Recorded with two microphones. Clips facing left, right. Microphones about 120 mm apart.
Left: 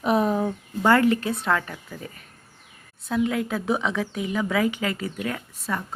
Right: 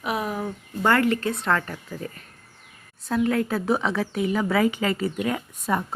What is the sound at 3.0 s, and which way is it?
Speech, 5° left (ahead or behind).